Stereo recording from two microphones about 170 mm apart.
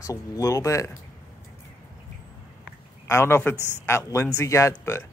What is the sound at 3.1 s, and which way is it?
Speech, 15° left (ahead or behind).